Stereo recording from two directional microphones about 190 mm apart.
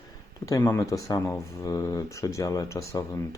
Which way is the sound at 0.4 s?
15° left (ahead or behind).